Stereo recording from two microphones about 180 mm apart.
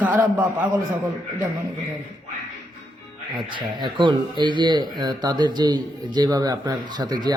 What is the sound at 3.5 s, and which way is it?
Speech, 25° right (ahead or behind).